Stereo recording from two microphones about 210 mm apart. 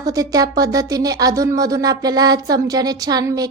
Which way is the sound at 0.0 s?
15° right (ahead or behind).